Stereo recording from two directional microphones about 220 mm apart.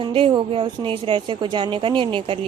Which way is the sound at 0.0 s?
20° right (ahead or behind).